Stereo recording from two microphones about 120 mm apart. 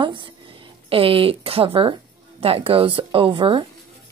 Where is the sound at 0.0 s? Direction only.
45° right (ahead or behind).